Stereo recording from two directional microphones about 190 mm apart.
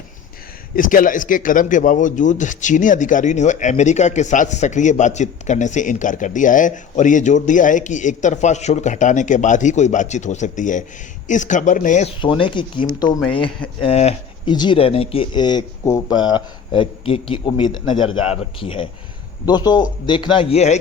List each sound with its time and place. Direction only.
0.8 s speech: 45° left (ahead or behind)
12.2 s speech: 25° left (ahead or behind)